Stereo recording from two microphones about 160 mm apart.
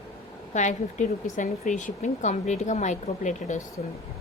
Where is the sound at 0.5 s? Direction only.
50° left (ahead or behind).